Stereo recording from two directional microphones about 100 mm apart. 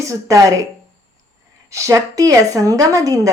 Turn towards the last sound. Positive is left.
turn(degrees=-35)  # may be behind; listen again after turning